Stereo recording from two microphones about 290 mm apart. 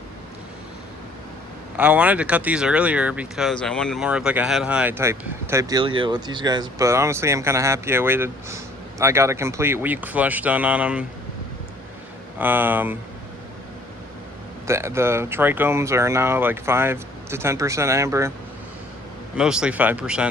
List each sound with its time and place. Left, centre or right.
1.7 s speech: centre
12.4 s speech: centre
14.7 s speech: centre
19.4 s speech: centre